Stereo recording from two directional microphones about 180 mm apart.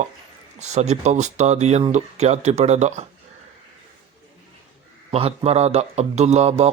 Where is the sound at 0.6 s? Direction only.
40° right (ahead or behind).